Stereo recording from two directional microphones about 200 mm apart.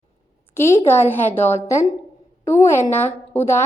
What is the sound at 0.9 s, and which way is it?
A woman's voice, 10° left (ahead or behind).